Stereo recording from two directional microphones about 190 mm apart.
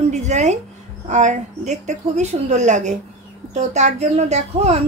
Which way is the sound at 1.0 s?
40° right (ahead or behind).